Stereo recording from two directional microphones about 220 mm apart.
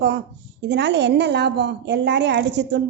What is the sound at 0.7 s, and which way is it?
A woman's voice, 50° right (ahead or behind).